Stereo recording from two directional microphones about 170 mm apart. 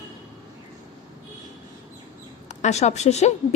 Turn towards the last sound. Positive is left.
turn(degrees=40)  # may be behind; listen again after turning